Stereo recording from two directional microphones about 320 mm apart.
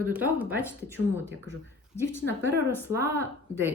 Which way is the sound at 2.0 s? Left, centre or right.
Centre.